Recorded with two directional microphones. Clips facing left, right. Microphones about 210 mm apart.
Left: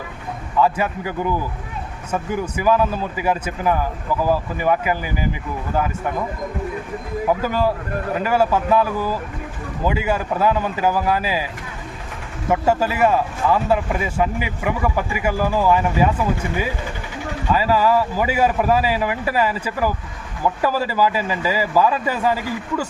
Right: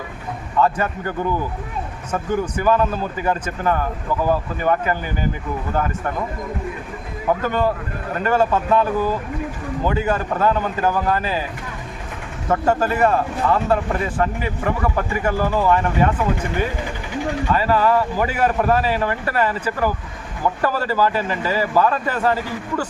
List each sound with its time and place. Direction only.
0.6 s a man's voice: 5° left (ahead or behind)
7.3 s a man's voice: 5° left (ahead or behind)
12.5 s a man's voice: 10° left (ahead or behind)
17.5 s a man's voice: 10° left (ahead or behind)